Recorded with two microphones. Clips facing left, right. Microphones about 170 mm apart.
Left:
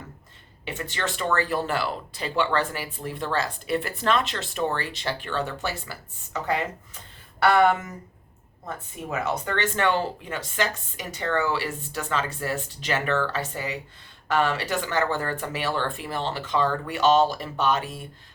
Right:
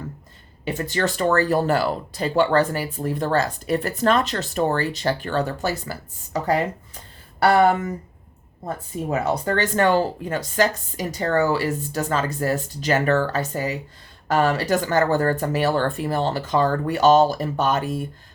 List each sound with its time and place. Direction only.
0.6 s speech: 40° right (ahead or behind)